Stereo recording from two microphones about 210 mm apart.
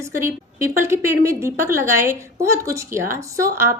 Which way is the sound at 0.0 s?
10° right (ahead or behind).